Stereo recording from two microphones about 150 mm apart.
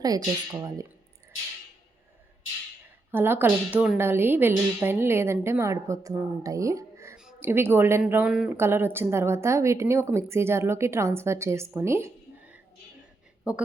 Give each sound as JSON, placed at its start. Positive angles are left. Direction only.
{"t": 0.0, "sound": "speech", "side_deg": -25}
{"t": 3.1, "sound": "a woman's voice", "side_deg": -15}